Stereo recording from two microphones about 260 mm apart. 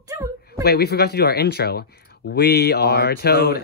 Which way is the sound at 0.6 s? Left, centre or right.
Left.